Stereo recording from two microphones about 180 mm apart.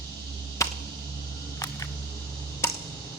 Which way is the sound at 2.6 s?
15° left (ahead or behind).